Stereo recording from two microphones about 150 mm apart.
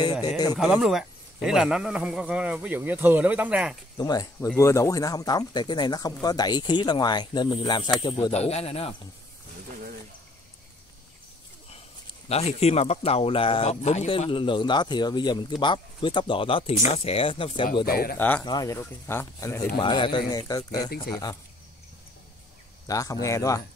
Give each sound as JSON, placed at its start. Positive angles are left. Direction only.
{"t": 0.0, "sound": "speech", "side_deg": 25}
{"t": 0.6, "sound": "speech", "side_deg": 0}
{"t": 4.0, "sound": "speech", "side_deg": 25}
{"t": 8.3, "sound": "speech", "side_deg": 45}
{"t": 12.3, "sound": "speech", "side_deg": 45}
{"t": 17.8, "sound": "speech", "side_deg": 85}
{"t": 18.4, "sound": "speech", "side_deg": 25}
{"t": 19.8, "sound": "speech", "side_deg": 35}
{"t": 22.8, "sound": "speech", "side_deg": 25}